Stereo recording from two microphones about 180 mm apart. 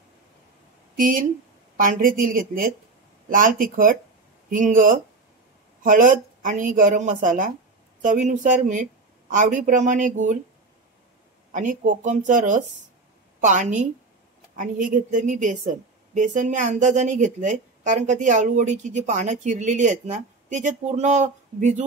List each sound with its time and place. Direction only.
0.9 s a woman's voice: 50° right (ahead or behind)
11.5 s a woman's voice: 45° right (ahead or behind)